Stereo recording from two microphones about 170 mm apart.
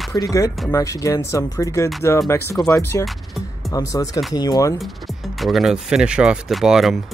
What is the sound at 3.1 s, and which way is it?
Music, centre (ahead or behind).